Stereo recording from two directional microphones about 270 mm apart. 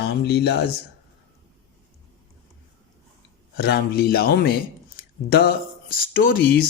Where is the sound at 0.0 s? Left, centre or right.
Left.